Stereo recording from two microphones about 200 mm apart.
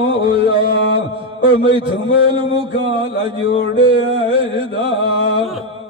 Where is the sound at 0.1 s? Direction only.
25° right (ahead or behind).